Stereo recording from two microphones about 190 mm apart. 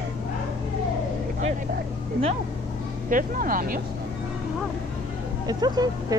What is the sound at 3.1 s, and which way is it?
Speech, 45° right (ahead or behind).